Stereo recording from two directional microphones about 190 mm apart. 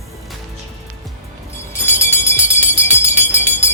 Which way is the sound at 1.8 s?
10° left (ahead or behind).